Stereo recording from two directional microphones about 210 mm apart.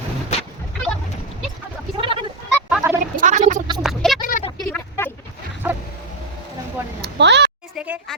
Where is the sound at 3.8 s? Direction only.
Centre (ahead or behind).